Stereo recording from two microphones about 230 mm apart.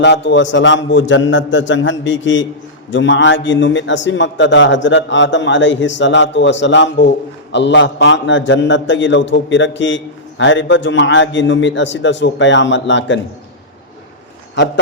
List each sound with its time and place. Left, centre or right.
0.0 s a man's voice: left